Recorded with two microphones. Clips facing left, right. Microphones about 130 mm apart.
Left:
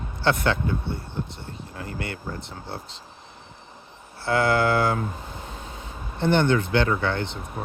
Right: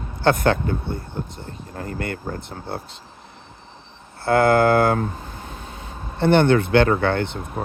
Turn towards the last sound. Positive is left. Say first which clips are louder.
# right 5 dB
turn(degrees=-55)  # may be behind; listen again after turning